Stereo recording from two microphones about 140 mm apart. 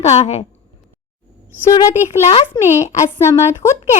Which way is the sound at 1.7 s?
25° left (ahead or behind).